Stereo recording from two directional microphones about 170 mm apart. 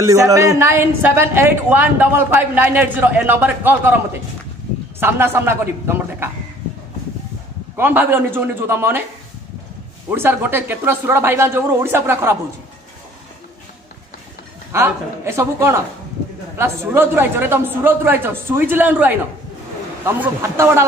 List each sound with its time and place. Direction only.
0.0 s a woman's voice: 20° right (ahead or behind)
7.7 s a woman's voice: 10° right (ahead or behind)
10.1 s a woman's voice: 10° right (ahead or behind)
14.7 s a woman's voice: 15° right (ahead or behind)